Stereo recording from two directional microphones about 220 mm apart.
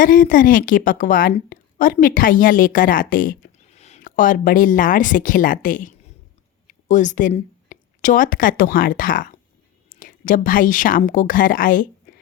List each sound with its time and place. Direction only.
0.0 s a woman's voice: 40° left (ahead or behind)